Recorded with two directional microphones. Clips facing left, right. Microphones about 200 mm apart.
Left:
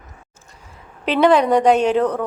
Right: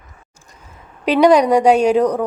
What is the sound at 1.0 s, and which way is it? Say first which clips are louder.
A woman's voice: right 3 dB; 15° right (ahead or behind).